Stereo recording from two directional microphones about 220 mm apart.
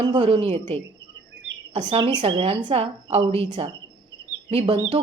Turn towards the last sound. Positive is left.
turn(degrees=-25)  # may be behind; listen again after turning